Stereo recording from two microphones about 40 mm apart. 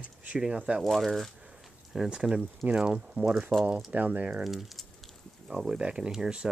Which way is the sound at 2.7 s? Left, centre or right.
Right.